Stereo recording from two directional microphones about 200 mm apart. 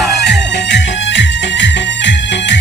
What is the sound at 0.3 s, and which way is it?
Music, 60° left (ahead or behind).